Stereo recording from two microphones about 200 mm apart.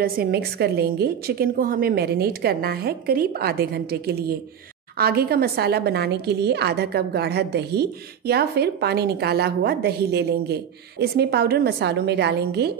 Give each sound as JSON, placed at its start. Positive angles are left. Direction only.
{"t": 0.0, "sound": "a woman's voice", "side_deg": -50}